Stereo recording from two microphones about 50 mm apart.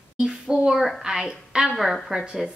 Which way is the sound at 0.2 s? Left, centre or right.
Centre.